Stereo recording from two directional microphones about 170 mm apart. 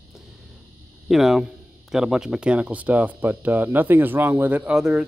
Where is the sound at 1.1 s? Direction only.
Centre (ahead or behind).